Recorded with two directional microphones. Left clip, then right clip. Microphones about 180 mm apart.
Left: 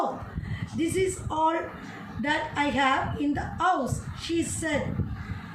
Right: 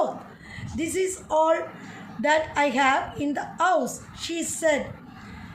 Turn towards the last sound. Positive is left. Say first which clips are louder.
# right 4 dB
turn(degrees=-55)  # may be behind; listen again after turning